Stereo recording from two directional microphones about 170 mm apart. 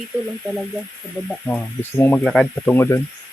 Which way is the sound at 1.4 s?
10° left (ahead or behind).